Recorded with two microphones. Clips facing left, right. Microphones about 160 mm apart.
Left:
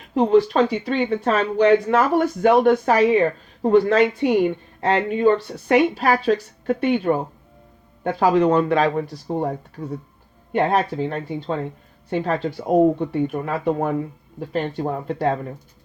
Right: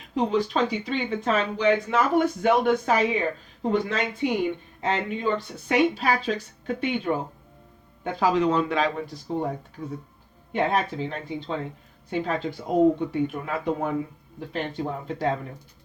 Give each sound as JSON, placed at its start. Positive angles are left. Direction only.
{"t": 0.1, "sound": "speech", "side_deg": 55}
{"t": 9.8, "sound": "speech", "side_deg": 40}